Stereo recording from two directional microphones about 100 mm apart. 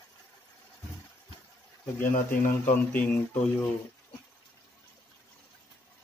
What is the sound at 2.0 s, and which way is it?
Speech, 20° left (ahead or behind).